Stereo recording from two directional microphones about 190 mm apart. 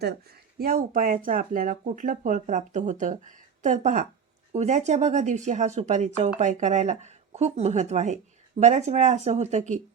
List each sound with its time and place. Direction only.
0.0 s speech: 55° right (ahead or behind)